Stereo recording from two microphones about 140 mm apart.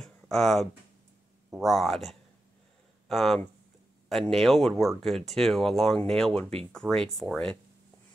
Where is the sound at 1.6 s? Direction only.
Centre (ahead or behind).